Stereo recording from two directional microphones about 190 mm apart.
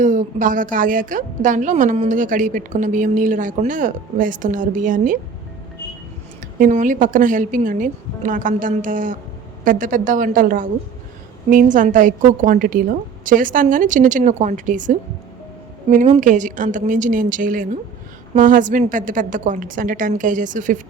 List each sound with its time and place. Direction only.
0.0 s a woman's voice: 40° right (ahead or behind)
6.6 s a woman's voice: 40° right (ahead or behind)